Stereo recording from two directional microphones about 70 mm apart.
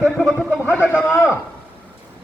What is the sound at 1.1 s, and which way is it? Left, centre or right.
Speech, right.